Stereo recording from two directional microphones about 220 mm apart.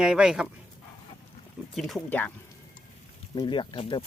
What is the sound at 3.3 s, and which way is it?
Speech, 20° left (ahead or behind).